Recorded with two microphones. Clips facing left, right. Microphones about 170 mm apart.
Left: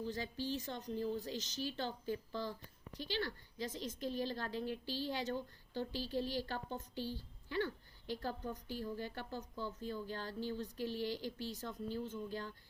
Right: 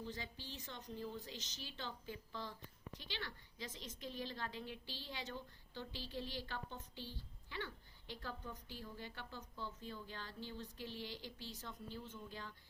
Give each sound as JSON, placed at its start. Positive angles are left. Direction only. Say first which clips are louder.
{"t": 0.0, "sound": "a woman's voice", "louder": "left 8 dB", "side_deg": 35}